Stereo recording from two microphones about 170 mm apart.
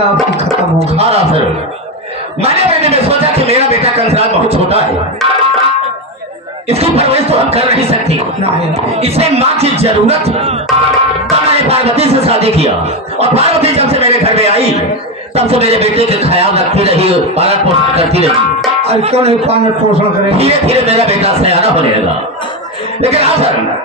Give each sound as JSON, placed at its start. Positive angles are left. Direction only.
{"t": 0.7, "sound": "a man's voice", "side_deg": -35}
{"t": 2.4, "sound": "a sound", "side_deg": -35}
{"t": 6.7, "sound": "a man's voice", "side_deg": -35}
{"t": 11.2, "sound": "music", "side_deg": -35}
{"t": 13.2, "sound": "a man's voice", "side_deg": -35}